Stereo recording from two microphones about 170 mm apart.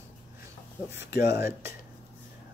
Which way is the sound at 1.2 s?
15° right (ahead or behind).